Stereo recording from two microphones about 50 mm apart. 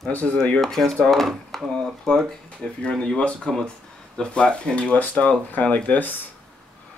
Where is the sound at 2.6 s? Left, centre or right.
Centre; by 6.3 s left.